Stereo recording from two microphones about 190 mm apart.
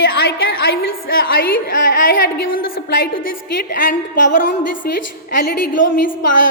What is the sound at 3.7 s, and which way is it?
Speech, 45° left (ahead or behind).